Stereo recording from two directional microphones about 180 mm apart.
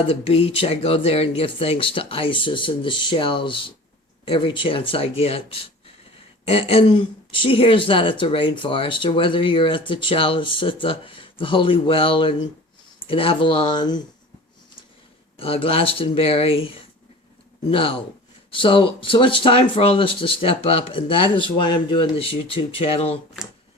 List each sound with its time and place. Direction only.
0.1 s speech: 30° left (ahead or behind)
15.4 s speech: 30° left (ahead or behind)